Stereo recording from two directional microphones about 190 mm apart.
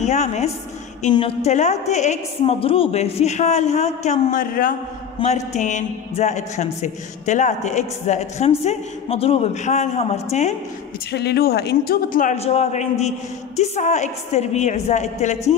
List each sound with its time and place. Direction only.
0.0 s a man's voice: 35° left (ahead or behind)
5.2 s a man's voice: 35° left (ahead or behind)
11.1 s a man's voice: 60° left (ahead or behind); by 15.3 s 35° left (ahead or behind)